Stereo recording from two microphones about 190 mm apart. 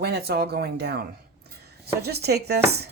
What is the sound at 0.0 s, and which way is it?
A woman's voice, 60° right (ahead or behind).